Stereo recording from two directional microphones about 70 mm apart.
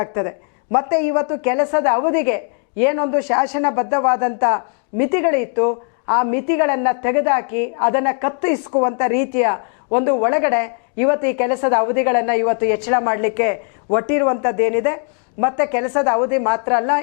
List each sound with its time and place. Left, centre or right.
0.0 s a woman's voice: left